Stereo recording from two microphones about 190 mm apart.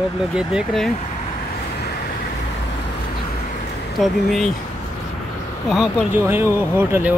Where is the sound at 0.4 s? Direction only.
5° right (ahead or behind).